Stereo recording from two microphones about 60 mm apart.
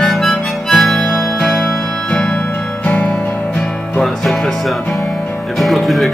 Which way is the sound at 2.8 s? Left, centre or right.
Left.